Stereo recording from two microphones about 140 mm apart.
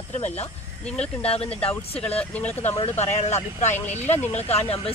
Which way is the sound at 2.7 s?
45° left (ahead or behind).